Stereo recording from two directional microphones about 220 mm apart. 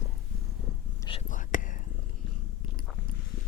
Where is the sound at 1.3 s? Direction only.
35° left (ahead or behind).